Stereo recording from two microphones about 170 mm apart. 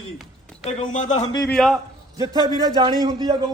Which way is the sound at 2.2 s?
25° right (ahead or behind).